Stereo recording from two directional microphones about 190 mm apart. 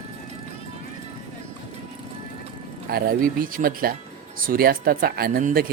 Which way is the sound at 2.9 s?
50° right (ahead or behind).